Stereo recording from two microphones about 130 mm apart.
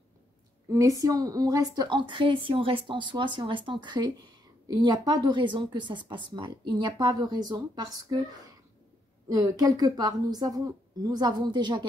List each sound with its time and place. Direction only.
0.7 s a woman's voice: 25° right (ahead or behind)
9.3 s a woman's voice: 30° right (ahead or behind)